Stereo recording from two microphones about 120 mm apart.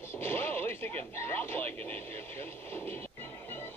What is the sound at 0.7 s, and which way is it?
Speech, 15° left (ahead or behind).